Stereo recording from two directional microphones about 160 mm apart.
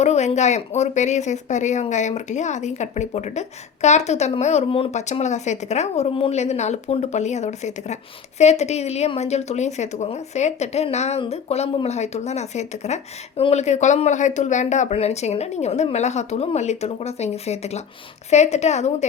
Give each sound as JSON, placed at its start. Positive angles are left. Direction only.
{"t": 0.0, "sound": "speech", "side_deg": 45}